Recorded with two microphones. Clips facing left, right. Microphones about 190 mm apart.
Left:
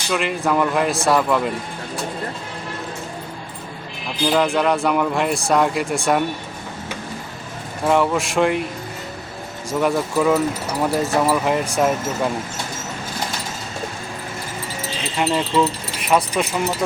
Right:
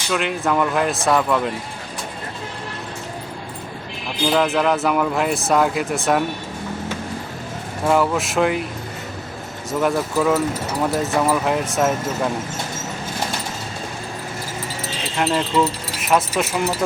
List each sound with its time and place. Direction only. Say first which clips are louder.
0.1 s speech: even; centre (ahead or behind)
4.3 s speech: even; centre (ahead or behind)
7.9 s speech: even; centre (ahead or behind)
9.8 s speech: left 1 dB; centre (ahead or behind)
15.2 s speech: even; centre (ahead or behind)